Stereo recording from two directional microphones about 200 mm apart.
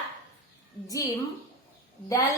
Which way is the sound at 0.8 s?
15° left (ahead or behind).